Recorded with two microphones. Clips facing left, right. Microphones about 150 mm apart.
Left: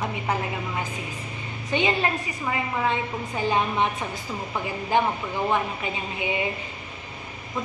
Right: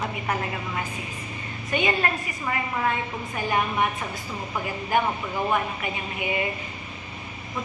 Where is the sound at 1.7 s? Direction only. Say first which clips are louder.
Left 1 dB; 20° left (ahead or behind).